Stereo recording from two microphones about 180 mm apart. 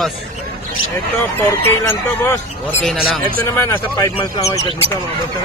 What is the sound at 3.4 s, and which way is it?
Speech, 15° left (ahead or behind).